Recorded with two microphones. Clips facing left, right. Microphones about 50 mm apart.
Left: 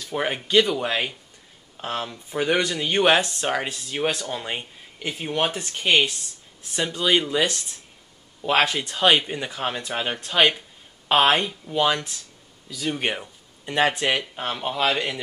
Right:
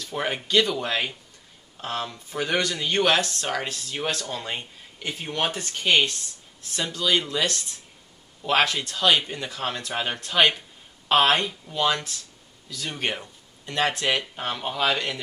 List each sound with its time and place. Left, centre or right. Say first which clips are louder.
0.0 s speech: left 2 dB; centre